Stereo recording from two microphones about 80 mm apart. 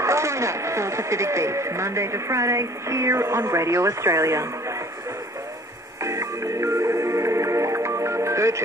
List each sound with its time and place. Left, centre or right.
0.0 s speech: right
6.0 s music: right